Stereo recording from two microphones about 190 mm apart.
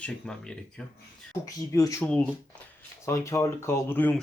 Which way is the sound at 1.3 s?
15° left (ahead or behind).